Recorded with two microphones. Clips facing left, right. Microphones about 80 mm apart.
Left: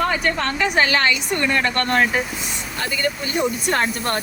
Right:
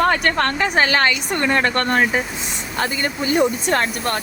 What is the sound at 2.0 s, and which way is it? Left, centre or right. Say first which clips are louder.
Speech: left 1 dB; centre.